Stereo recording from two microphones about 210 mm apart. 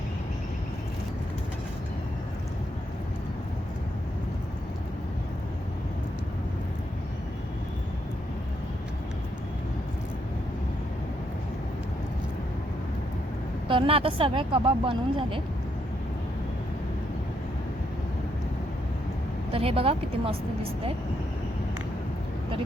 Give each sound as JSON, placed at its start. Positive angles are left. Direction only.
{"t": 13.7, "sound": "a woman's voice", "side_deg": -25}
{"t": 19.5, "sound": "a woman's voice", "side_deg": -25}